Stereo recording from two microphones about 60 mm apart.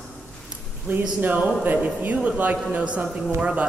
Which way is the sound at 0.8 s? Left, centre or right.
Right.